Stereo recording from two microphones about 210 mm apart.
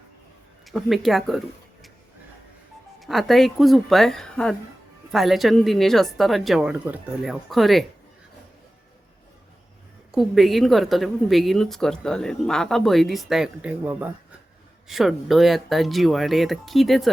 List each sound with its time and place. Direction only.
0.6 s speech: centre (ahead or behind)
3.0 s a woman's voice: centre (ahead or behind)
10.1 s a woman's voice: centre (ahead or behind)